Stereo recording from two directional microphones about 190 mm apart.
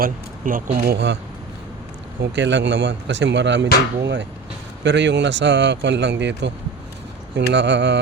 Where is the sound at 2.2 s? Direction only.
70° right (ahead or behind).